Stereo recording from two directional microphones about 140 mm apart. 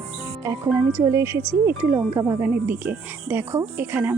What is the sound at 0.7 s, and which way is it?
Speech, 15° right (ahead or behind).